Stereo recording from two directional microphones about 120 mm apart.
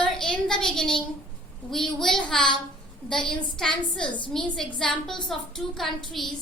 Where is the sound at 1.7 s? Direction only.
5° left (ahead or behind).